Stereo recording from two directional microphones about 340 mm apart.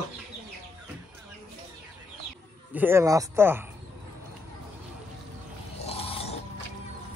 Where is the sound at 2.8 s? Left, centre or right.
Centre.